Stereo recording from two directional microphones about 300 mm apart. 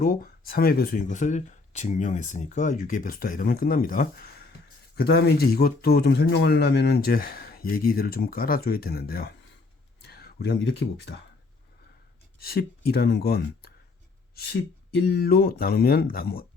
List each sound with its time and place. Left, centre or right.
0.0 s speech: left
12.4 s speech: left